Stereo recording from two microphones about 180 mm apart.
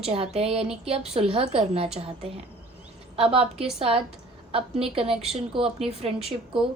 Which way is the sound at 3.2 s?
30° right (ahead or behind).